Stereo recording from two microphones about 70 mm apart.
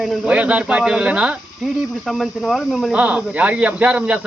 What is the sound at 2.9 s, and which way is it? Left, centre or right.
A man's voice, centre.